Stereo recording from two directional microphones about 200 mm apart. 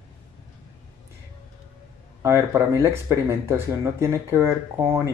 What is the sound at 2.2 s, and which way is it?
Speech, 15° right (ahead or behind).